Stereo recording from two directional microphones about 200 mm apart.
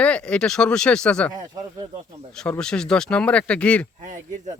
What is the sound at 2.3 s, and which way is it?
Speech, 5° left (ahead or behind).